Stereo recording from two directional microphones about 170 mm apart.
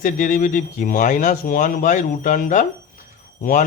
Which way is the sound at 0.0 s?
50° left (ahead or behind).